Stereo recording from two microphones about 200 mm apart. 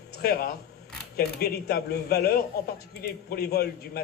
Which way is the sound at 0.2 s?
50° left (ahead or behind).